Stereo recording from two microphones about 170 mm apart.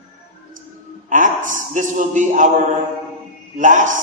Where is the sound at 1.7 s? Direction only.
50° right (ahead or behind).